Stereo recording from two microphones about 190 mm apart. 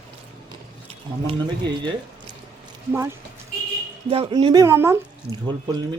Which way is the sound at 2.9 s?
15° right (ahead or behind).